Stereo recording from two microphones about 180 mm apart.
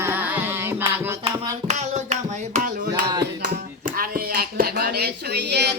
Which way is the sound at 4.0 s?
55° right (ahead or behind).